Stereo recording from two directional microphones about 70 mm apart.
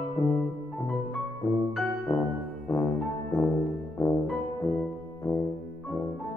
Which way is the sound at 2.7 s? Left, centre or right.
Left.